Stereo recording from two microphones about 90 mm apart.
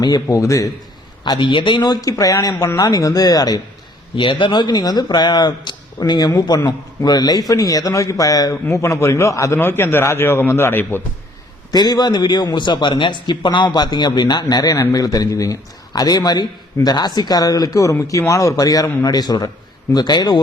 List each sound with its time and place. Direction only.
0.3 s a man's voice: 40° left (ahead or behind)
1.2 s a man's voice: 60° left (ahead or behind); by 3.6 s 45° left (ahead or behind)
4.1 s a man's voice: 65° left (ahead or behind); by 8.5 s 40° left (ahead or behind)
8.6 s a man's voice: 30° left (ahead or behind)
11.7 s a man's voice: 50° left (ahead or behind)